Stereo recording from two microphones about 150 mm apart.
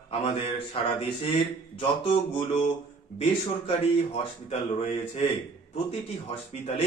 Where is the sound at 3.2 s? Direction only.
45° left (ahead or behind).